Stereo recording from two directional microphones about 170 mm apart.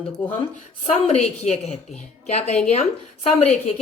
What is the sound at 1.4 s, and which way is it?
A woman's voice, 40° left (ahead or behind).